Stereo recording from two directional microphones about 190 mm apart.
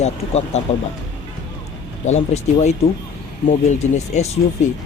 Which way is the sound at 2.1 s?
35° left (ahead or behind).